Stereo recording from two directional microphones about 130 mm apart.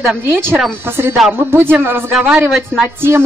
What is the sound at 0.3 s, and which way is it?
Speech, 15° right (ahead or behind).